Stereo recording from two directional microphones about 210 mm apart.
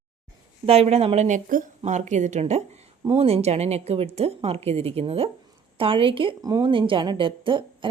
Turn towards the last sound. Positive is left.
turn(degrees=-25)  # may be behind; listen again after turning